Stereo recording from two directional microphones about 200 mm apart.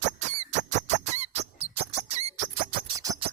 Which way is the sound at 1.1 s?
35° right (ahead or behind).